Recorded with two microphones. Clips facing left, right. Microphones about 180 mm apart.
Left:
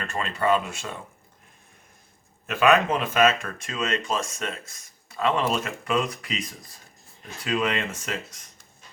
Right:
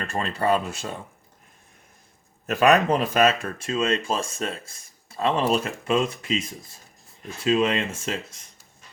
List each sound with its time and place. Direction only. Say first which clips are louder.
0.0 s speech: right 1 dB; 35° right (ahead or behind)
2.5 s speech: right 2 dB; 40° right (ahead or behind)
7.4 s speech: right 4 dB; 25° right (ahead or behind)